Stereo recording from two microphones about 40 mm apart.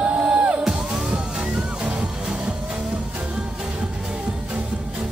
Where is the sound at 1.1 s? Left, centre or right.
Right.